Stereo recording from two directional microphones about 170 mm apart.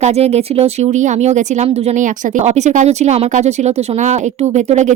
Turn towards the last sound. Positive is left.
turn(degrees=-45)  # may be behind; listen again after turning